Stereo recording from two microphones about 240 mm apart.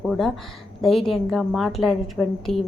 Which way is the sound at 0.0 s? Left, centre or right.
Centre.